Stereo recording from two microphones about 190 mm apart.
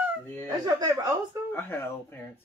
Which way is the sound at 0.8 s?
20° right (ahead or behind).